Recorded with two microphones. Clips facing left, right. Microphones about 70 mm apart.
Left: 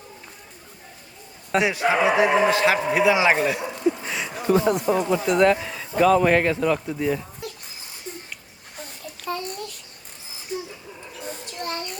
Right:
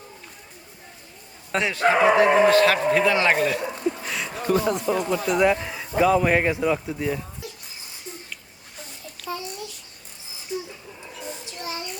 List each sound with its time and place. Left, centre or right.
1.5 s a man's voice: centre
4.0 s a sound: centre
4.7 s speech: centre
5.6 s a sound: centre
6.0 s a man's voice: centre
9.2 s babbling: left
11.4 s child singing: left